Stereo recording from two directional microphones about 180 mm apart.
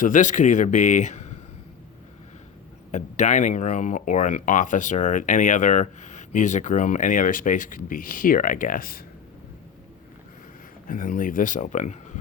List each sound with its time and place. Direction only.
0.0 s speech: 45° left (ahead or behind)
2.9 s speech: 40° left (ahead or behind)
10.8 s speech: 50° left (ahead or behind)